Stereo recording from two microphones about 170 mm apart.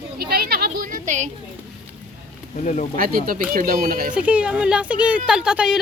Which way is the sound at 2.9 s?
55° right (ahead or behind).